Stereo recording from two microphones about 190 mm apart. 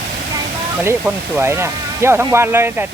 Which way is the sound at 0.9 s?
15° right (ahead or behind).